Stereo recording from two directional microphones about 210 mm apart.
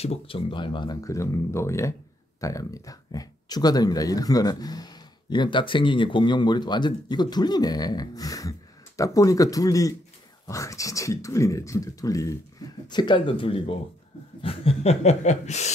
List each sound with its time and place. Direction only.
0.0 s speech: 25° left (ahead or behind)